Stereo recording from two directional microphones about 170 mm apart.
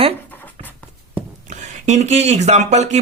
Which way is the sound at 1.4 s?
40° right (ahead or behind).